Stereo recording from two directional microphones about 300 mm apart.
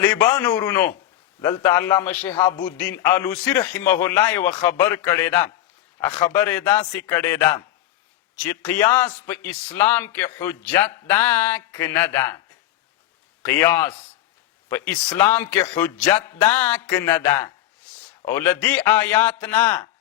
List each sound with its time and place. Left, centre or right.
0.0 s a man's voice: centre
13.5 s a man's voice: centre